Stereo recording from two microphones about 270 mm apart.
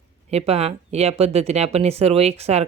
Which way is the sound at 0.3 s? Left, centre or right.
Right.